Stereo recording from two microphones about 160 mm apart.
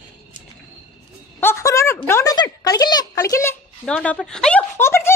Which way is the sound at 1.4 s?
15° left (ahead or behind).